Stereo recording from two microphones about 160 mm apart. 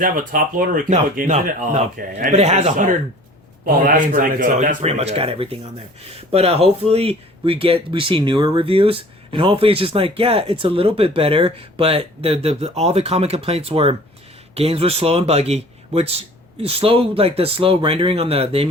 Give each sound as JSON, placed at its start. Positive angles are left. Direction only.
{"t": 0.0, "sound": "speech", "side_deg": -60}
{"t": 2.3, "sound": "speech", "side_deg": -40}